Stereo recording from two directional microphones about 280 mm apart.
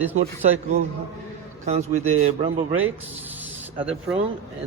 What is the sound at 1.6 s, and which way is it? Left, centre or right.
Speech, right.